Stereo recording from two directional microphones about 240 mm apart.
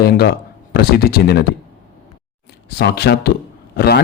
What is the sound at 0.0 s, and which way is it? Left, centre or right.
A man's voice, left.